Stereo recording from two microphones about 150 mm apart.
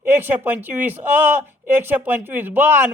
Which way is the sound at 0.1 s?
15° right (ahead or behind).